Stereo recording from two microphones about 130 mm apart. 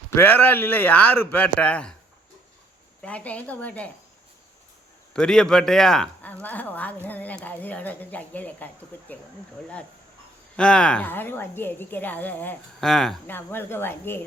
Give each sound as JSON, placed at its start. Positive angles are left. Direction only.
{"t": 0.2, "sound": "speech", "side_deg": 15}
{"t": 3.0, "sound": "speech", "side_deg": 10}
{"t": 5.1, "sound": "speech", "side_deg": 5}
{"t": 10.6, "sound": "speech", "side_deg": 5}
{"t": 12.8, "sound": "speech", "side_deg": 5}
{"t": 13.2, "sound": "speech", "side_deg": 15}